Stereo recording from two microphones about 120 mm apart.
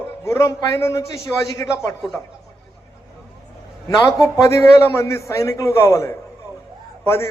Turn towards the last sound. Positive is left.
turn(degrees=20)  # may be behind; listen again after turning